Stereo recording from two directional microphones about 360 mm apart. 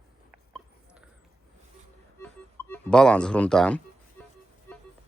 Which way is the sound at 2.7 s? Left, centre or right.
Centre.